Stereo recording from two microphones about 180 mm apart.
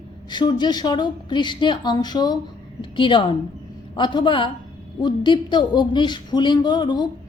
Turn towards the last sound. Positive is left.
turn(degrees=25)  # may be behind; listen again after turning